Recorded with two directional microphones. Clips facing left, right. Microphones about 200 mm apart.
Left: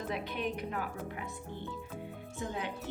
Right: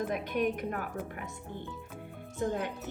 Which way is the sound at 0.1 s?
50° right (ahead or behind).